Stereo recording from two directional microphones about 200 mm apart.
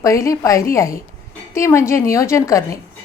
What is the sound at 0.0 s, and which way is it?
A woman's voice, 15° left (ahead or behind).